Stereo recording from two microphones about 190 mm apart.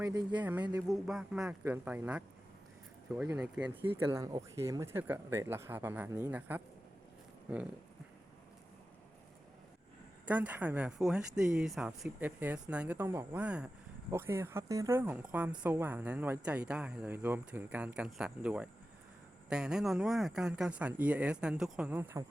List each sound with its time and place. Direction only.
0.0 s speech: 20° right (ahead or behind)
0.8 s speech: 5° right (ahead or behind)
3.9 s speech: 15° right (ahead or behind)
10.2 s speech: 10° right (ahead or behind)